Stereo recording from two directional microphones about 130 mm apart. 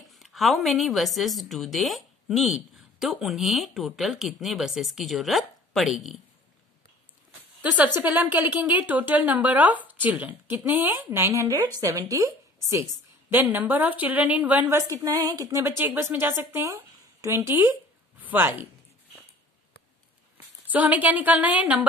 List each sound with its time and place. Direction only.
0.1 s speech: centre (ahead or behind)
7.6 s a woman's voice: 10° right (ahead or behind)
13.3 s a woman's voice: 15° right (ahead or behind)
14.8 s a woman's voice: 25° right (ahead or behind)
20.6 s a woman's voice: 10° right (ahead or behind)